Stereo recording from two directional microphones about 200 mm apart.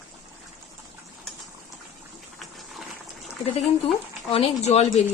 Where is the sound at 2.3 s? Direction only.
Centre (ahead or behind).